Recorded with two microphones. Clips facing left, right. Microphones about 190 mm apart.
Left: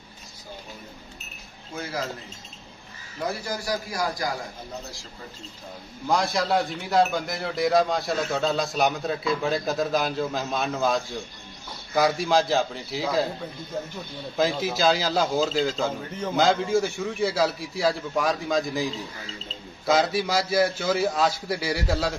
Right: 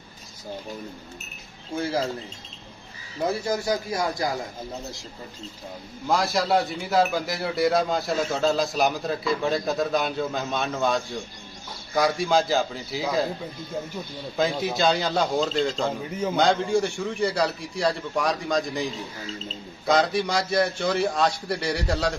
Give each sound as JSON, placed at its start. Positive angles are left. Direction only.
{"t": 1.8, "sound": "a man's voice", "side_deg": -30}
{"t": 3.2, "sound": "a man's voice", "side_deg": -25}
{"t": 6.0, "sound": "speech", "side_deg": 0}
{"t": 14.3, "sound": "speech", "side_deg": 0}
{"t": 19.9, "sound": "speech", "side_deg": 0}